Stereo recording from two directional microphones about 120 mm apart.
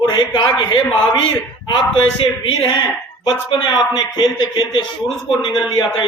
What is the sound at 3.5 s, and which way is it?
A man's voice, 40° left (ahead or behind).